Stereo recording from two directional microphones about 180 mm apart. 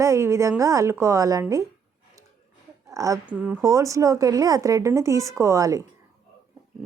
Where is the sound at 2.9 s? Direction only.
20° right (ahead or behind).